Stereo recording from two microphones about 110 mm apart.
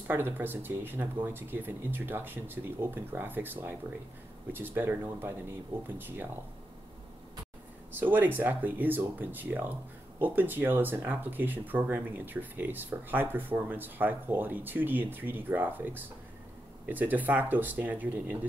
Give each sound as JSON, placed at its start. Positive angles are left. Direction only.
{"t": 0.1, "sound": "speech", "side_deg": -20}
{"t": 8.0, "sound": "speech", "side_deg": -15}